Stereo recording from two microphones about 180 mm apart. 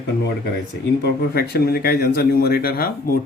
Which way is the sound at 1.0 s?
65° left (ahead or behind).